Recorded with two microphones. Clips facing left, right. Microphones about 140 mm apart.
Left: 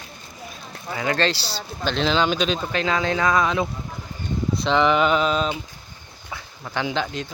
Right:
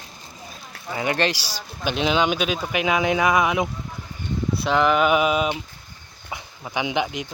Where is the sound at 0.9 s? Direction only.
20° right (ahead or behind).